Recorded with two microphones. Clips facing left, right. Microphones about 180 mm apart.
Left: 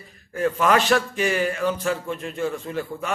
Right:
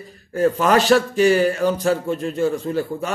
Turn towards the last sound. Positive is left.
turn(degrees=-35)  # may be behind; listen again after turning